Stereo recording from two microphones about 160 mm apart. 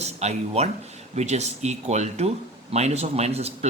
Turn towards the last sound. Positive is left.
turn(degrees=-40)  # may be behind; listen again after turning